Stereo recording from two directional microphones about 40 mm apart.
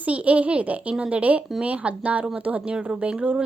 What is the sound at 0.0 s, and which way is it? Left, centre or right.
Speech, right.